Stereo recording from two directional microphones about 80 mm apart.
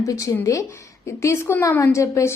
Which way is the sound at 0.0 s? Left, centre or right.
Left.